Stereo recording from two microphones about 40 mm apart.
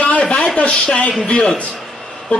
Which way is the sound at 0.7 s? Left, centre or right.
Left.